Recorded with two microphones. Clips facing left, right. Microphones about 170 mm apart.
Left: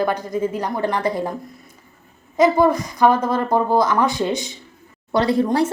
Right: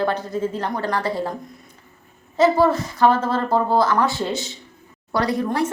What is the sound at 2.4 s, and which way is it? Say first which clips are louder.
A woman's voice: left 1 dB; 15° left (ahead or behind).